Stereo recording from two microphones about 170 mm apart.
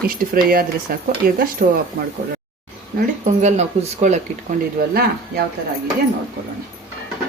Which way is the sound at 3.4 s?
45° right (ahead or behind).